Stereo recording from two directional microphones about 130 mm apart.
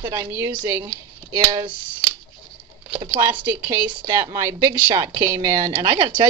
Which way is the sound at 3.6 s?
20° right (ahead or behind).